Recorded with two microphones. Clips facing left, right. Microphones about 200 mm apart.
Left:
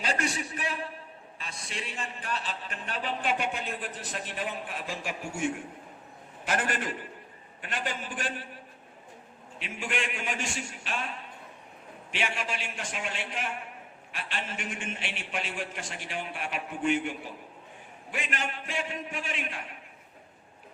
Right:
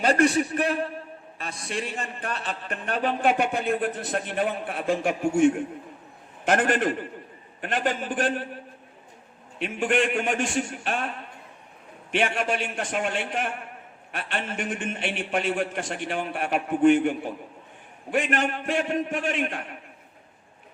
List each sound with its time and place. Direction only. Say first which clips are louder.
0.0 s a man's voice: right 11 dB; 55° right (ahead or behind)
9.6 s a man's voice: right 10 dB; 55° right (ahead or behind)
12.1 s a man's voice: right 9 dB; 50° right (ahead or behind)